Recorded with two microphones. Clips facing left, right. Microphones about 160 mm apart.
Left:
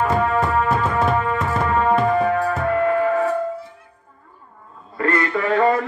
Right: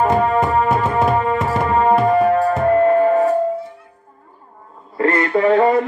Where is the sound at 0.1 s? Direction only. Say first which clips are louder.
Right 3 dB; 35° right (ahead or behind).